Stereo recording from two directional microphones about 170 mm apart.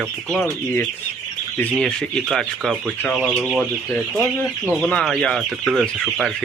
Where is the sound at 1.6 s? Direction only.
5° left (ahead or behind).